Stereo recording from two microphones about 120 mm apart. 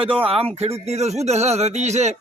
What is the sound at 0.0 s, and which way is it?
A man's voice, 50° right (ahead or behind).